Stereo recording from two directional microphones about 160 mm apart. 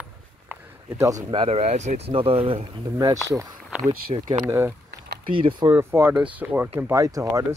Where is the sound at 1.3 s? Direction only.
35° right (ahead or behind).